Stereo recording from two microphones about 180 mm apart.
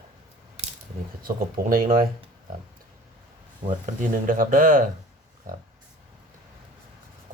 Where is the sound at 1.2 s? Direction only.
50° right (ahead or behind).